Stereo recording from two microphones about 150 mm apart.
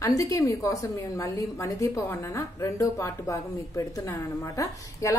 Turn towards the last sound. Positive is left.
turn(degrees=20)  # may be behind; listen again after turning